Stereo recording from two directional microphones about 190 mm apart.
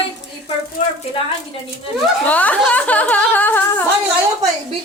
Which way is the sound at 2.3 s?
10° left (ahead or behind).